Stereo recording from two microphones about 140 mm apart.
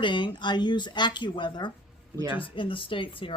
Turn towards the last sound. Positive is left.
turn(degrees=40)  # may be behind; listen again after turning